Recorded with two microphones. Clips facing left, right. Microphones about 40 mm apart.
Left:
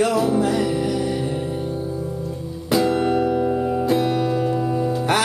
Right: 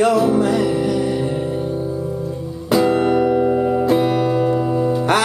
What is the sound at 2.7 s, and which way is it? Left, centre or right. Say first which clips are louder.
Music: right 3 dB; centre.